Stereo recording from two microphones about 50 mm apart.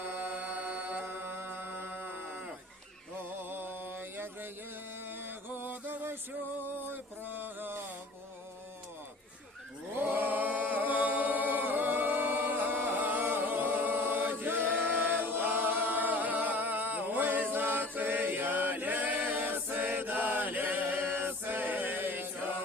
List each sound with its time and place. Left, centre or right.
0.2 s music: right
5.0 s a sound: right
10.0 s singing: right
17.9 s chant: right